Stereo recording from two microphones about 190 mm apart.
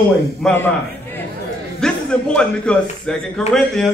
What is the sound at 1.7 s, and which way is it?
A man's voice, 5° left (ahead or behind).